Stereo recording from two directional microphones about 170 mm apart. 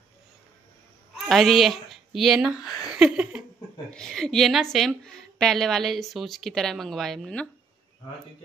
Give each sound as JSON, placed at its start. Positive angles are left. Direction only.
{"t": 1.1, "sound": "a woman's voice", "side_deg": 0}